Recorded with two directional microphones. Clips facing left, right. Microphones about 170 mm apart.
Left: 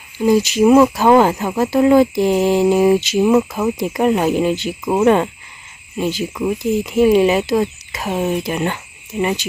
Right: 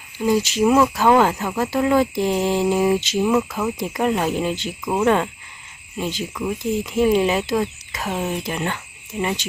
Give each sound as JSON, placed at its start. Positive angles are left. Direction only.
{"t": 0.2, "sound": "speech", "side_deg": 15}